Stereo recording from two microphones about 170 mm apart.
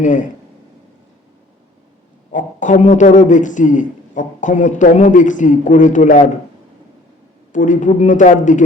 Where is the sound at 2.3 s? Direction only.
45° left (ahead or behind).